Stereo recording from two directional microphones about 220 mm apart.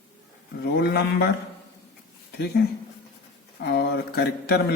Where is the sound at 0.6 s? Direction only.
50° left (ahead or behind).